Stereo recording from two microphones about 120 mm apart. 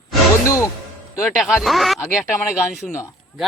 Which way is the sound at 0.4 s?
25° left (ahead or behind).